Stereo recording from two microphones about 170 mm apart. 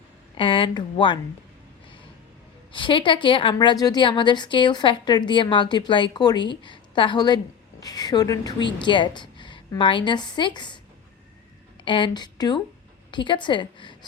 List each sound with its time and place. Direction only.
0.3 s a woman's voice: 30° left (ahead or behind)
2.7 s a woman's voice: 30° left (ahead or behind)
11.9 s a woman's voice: 30° left (ahead or behind)